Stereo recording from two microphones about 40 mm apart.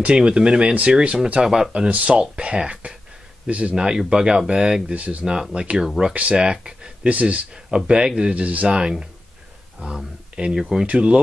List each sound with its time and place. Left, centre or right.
0.0 s speech: right
1.4 s speech: centre
2.0 s speech: right
3.4 s speech: right
3.7 s speech: centre
4.9 s speech: right
5.2 s speech: right
6.0 s speech: centre
6.3 s speech: right
7.1 s speech: right
7.5 s speech: centre
9.8 s speech: right
10.5 s speech: centre
10.9 s speech: right